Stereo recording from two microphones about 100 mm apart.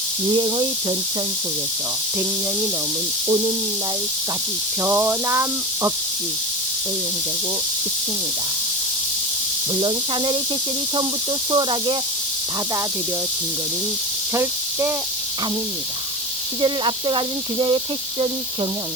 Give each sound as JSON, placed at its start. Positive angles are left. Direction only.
{"t": 0.3, "sound": "speech", "side_deg": -55}
{"t": 4.8, "sound": "speech", "side_deg": -25}
{"t": 11.5, "sound": "speech", "side_deg": -55}
{"t": 14.3, "sound": "speech", "side_deg": -25}
{"t": 16.6, "sound": "speech", "side_deg": -55}